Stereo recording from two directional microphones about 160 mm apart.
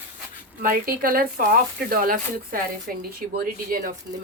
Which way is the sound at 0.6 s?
60° right (ahead or behind).